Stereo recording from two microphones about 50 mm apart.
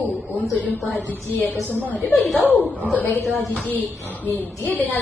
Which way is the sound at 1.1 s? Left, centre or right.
Left.